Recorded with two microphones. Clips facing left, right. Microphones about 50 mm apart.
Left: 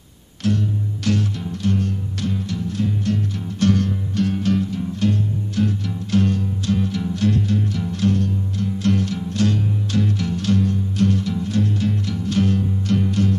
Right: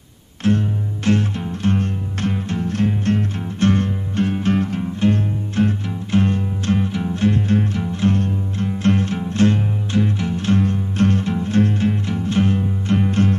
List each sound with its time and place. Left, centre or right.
0.4 s music: right
3.5 s music: right
4.6 s music: right